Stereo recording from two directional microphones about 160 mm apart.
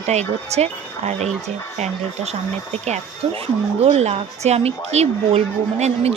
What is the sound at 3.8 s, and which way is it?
A woman's voice, 40° right (ahead or behind).